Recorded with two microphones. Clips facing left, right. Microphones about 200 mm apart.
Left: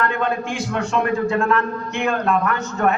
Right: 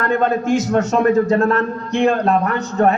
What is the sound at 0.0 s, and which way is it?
A man's voice, 40° right (ahead or behind).